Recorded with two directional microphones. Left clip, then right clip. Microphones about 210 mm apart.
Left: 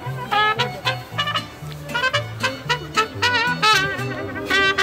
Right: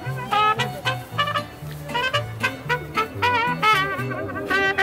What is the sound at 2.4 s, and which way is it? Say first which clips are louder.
Music: left 1 dB; 25° left (ahead or behind).